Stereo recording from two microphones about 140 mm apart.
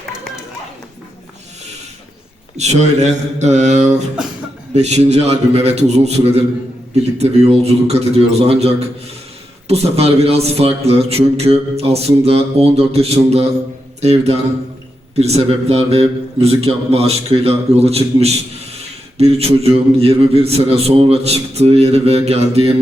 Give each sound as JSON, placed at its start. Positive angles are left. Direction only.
{"t": 2.6, "sound": "a man's voice", "side_deg": -55}